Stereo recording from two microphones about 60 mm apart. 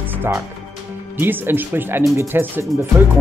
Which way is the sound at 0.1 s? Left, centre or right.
Right.